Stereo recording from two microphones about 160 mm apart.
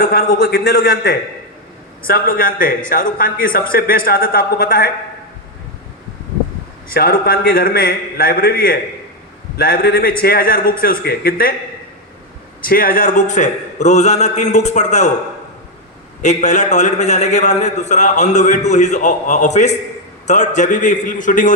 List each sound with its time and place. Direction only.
0.0 s a man's voice: 70° left (ahead or behind)
6.8 s a man's voice: 65° left (ahead or behind)
12.6 s a man's voice: 65° left (ahead or behind)
16.2 s a man's voice: 50° left (ahead or behind)